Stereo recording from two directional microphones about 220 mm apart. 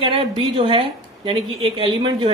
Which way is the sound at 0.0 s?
25° right (ahead or behind).